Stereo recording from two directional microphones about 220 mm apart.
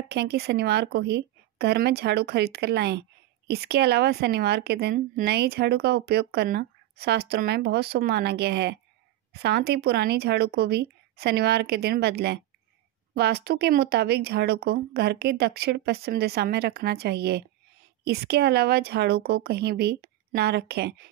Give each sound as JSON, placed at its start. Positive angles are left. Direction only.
{"t": 0.1, "sound": "a woman's voice", "side_deg": -50}